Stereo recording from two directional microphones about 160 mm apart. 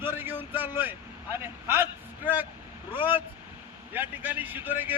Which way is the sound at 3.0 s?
15° right (ahead or behind).